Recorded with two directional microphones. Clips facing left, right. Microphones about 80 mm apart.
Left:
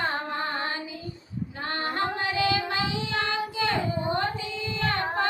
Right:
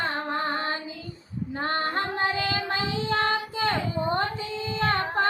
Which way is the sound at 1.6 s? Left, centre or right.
Right.